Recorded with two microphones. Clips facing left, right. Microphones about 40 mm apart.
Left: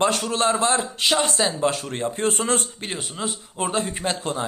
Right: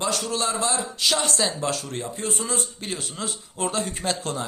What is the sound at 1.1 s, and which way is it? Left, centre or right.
Speech, left.